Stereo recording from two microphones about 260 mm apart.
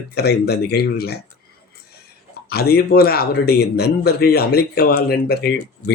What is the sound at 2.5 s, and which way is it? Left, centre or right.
A man's voice, left.